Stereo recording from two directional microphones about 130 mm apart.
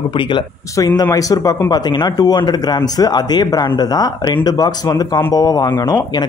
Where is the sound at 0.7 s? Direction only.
30° left (ahead or behind).